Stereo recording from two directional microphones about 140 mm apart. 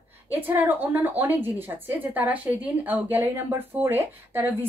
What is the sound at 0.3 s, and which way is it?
A woman's voice, 15° right (ahead or behind).